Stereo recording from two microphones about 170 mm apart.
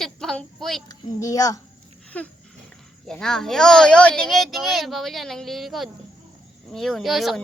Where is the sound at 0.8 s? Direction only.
20° left (ahead or behind).